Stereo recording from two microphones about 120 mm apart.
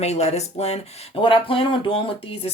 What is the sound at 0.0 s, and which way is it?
Speech, 65° left (ahead or behind).